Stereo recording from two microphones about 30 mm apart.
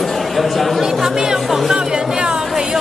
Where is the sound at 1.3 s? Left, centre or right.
Centre.